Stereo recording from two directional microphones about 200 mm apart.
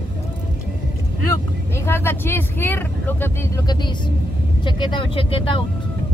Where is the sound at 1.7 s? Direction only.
10° left (ahead or behind).